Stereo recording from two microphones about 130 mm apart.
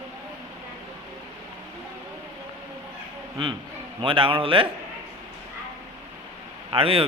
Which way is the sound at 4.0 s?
45° right (ahead or behind).